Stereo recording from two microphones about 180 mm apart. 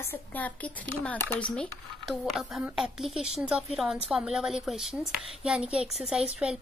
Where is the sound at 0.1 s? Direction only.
10° left (ahead or behind).